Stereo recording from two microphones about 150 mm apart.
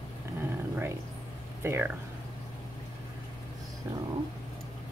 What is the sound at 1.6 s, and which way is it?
Speech, 15° right (ahead or behind).